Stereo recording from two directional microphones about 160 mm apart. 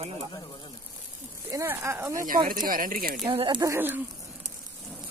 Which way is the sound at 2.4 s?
60° right (ahead or behind).